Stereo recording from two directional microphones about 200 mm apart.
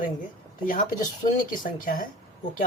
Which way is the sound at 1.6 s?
45° left (ahead or behind).